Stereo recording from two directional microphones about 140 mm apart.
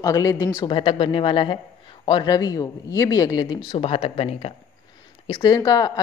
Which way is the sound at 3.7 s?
45° left (ahead or behind).